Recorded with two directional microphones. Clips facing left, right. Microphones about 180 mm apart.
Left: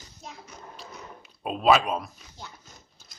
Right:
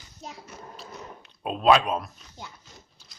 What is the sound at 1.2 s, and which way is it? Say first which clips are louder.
Speech: right 1 dB; 5° left (ahead or behind).